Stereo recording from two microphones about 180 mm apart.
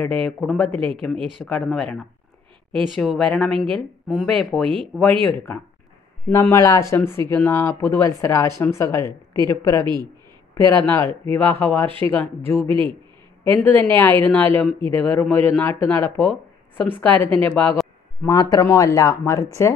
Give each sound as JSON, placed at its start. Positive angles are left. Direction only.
{"t": 0.0, "sound": "speech", "side_deg": 5}
{"t": 6.3, "sound": "speech", "side_deg": 15}
{"t": 10.9, "sound": "speech", "side_deg": 15}
{"t": 12.6, "sound": "a man's voice", "side_deg": -30}
{"t": 13.5, "sound": "a man's voice", "side_deg": 10}
{"t": 18.3, "sound": "speech", "side_deg": 20}